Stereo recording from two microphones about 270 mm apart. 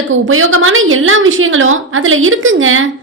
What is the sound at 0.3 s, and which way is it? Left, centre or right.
A woman's voice, right.